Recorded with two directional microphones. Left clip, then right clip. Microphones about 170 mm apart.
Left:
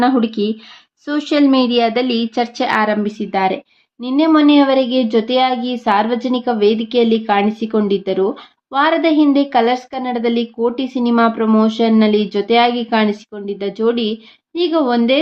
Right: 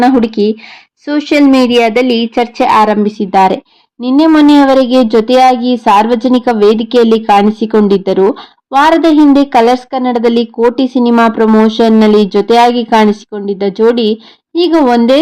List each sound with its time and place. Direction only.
1.0 s a woman's voice: 5° right (ahead or behind); by 15.2 s 40° right (ahead or behind)